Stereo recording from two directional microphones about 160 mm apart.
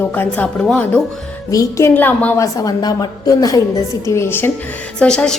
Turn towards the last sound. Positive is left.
turn(degrees=5)  # may be behind; listen again after turning